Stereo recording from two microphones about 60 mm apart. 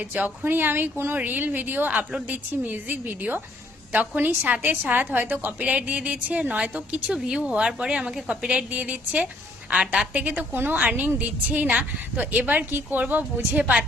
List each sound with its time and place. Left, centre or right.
0.0 s speech: right
0.4 s a woman's voice: right